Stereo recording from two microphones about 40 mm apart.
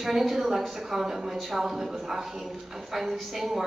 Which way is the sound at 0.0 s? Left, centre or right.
Centre.